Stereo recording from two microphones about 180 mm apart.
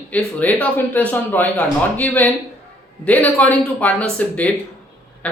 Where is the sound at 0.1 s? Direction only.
10° left (ahead or behind).